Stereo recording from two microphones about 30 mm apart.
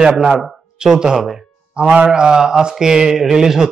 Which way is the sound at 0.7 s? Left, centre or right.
Right.